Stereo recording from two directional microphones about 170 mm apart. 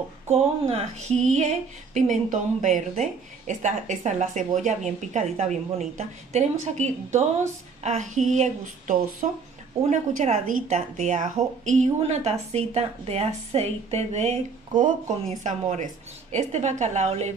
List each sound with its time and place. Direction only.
0.3 s a woman's voice: 35° right (ahead or behind)